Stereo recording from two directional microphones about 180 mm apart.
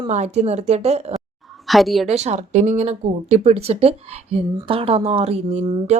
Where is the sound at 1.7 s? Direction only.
Centre (ahead or behind).